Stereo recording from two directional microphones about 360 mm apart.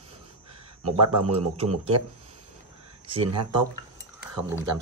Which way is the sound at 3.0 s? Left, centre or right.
Centre.